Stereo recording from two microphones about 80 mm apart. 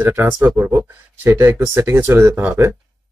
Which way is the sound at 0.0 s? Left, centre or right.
Right.